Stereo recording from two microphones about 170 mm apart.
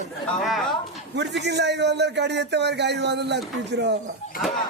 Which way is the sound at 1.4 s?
90° right.